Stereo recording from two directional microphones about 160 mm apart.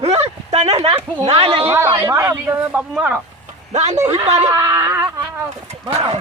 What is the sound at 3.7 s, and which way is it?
Speech, 45° right (ahead or behind).